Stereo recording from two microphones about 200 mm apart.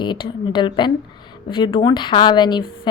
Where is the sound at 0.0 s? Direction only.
20° left (ahead or behind).